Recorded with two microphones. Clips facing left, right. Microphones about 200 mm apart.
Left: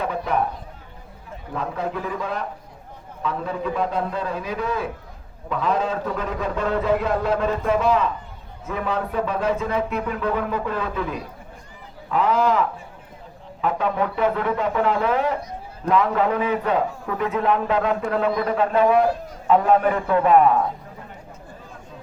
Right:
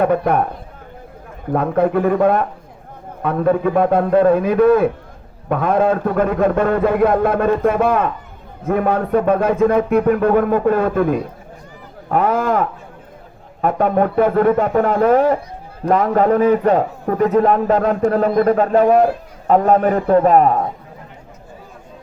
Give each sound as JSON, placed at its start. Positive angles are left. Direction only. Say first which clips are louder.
{"t": 0.0, "sound": "a man's voice", "louder": "right 8 dB", "side_deg": -55}
{"t": 1.5, "sound": "a man's voice", "louder": "right 11 dB", "side_deg": -55}